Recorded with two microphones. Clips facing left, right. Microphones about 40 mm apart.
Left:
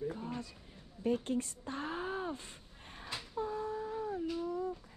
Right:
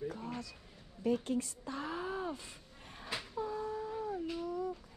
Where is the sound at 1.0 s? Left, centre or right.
Left.